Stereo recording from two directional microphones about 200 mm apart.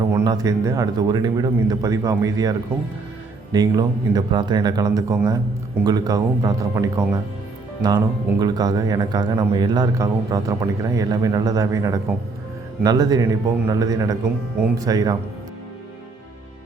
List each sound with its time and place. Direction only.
0.1 s a man's voice: 15° right (ahead or behind)